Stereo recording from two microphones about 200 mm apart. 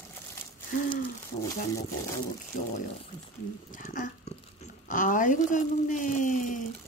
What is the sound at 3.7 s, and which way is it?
Speech, 45° left (ahead or behind).